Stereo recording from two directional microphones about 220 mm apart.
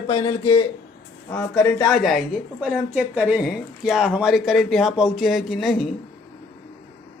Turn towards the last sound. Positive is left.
turn(degrees=0)  # may be behind; listen again after turning